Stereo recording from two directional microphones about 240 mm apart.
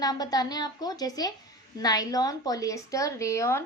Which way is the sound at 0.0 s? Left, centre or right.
Centre.